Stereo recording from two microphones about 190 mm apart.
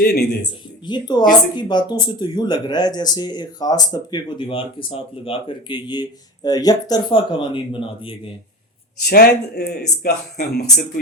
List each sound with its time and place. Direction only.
0.0 s speech: 55° left (ahead or behind)
0.9 s speech: 20° left (ahead or behind)
9.0 s speech: 55° left (ahead or behind)